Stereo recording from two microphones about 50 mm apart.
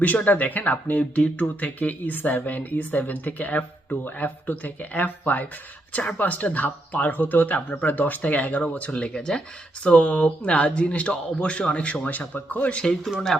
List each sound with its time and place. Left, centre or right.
0.3 s speech: left
13.1 s speech: centre